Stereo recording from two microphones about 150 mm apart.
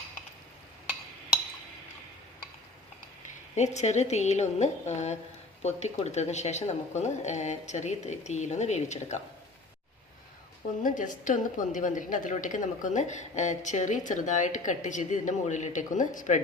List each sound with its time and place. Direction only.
3.8 s a woman's voice: 50° left (ahead or behind)
10.8 s a woman's voice: 60° left (ahead or behind)